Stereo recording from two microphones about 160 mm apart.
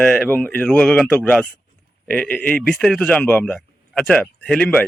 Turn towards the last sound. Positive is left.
turn(degrees=5)  # may be behind; listen again after turning